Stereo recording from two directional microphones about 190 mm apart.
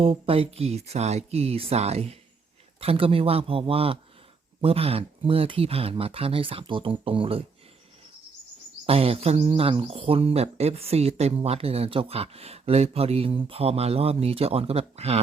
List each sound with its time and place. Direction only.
0.0 s speech: 30° right (ahead or behind)
8.9 s speech: 30° right (ahead or behind)